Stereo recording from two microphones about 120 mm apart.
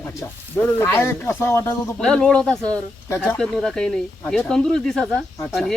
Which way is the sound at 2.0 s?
5° left (ahead or behind).